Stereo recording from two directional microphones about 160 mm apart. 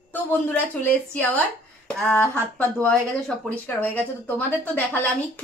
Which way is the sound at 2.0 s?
10° left (ahead or behind).